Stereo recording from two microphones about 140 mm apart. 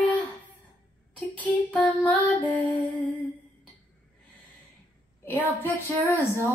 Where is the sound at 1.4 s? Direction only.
10° left (ahead or behind).